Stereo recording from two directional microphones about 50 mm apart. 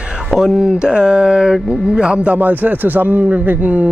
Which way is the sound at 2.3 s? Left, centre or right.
Right.